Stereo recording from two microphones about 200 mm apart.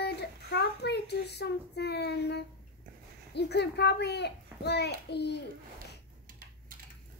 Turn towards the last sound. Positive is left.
turn(degrees=55)  # may be behind; listen again after turning